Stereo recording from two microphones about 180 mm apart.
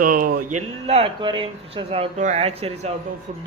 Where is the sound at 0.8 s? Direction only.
30° right (ahead or behind).